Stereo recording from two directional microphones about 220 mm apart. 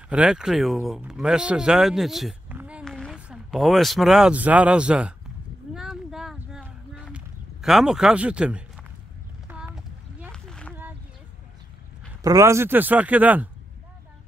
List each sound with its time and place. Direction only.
0.1 s speech: 5° right (ahead or behind)
5.8 s a sound: centre (ahead or behind)
12.2 s speech: 15° right (ahead or behind)